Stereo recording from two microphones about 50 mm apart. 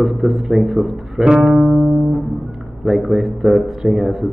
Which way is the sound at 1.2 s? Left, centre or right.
Centre.